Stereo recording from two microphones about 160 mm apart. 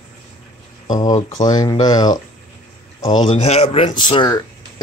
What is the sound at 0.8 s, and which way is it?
Speech, 25° left (ahead or behind).